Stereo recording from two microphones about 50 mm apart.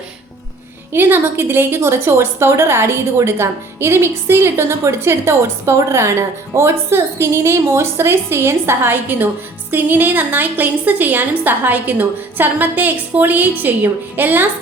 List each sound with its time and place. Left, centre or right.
0.9 s a woman's voice: right